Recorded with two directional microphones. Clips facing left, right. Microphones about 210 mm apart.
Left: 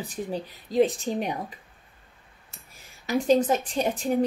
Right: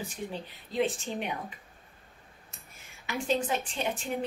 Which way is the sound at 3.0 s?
40° left (ahead or behind).